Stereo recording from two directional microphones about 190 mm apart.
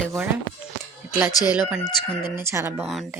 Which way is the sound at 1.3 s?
20° left (ahead or behind).